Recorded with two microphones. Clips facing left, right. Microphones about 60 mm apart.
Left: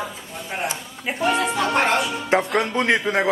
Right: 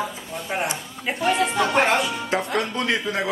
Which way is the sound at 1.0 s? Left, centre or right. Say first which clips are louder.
Even; centre.